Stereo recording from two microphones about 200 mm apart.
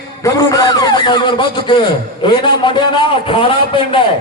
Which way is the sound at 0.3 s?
20° left (ahead or behind).